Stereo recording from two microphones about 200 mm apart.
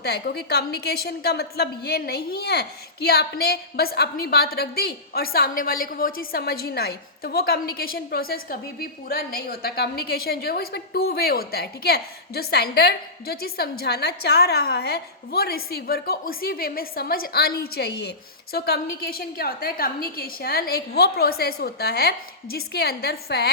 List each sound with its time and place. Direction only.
0.0 s a woman's voice: 55° left (ahead or behind)